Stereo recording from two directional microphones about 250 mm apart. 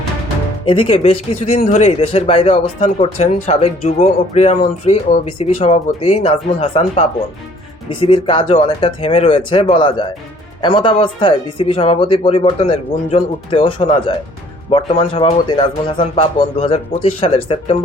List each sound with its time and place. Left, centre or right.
0.6 s speech: left